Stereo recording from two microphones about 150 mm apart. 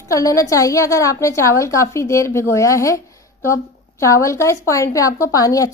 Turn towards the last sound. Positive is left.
turn(degrees=20)  # may be behind; listen again after turning